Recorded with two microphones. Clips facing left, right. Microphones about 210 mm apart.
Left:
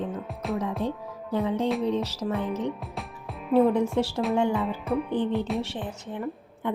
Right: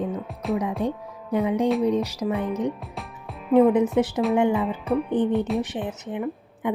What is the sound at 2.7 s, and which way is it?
Music, centre (ahead or behind).